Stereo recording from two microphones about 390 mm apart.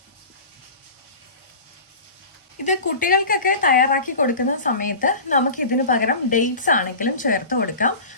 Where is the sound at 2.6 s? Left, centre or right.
Centre.